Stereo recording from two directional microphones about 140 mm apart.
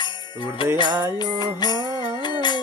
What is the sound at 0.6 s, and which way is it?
Jingle bell, 35° left (ahead or behind).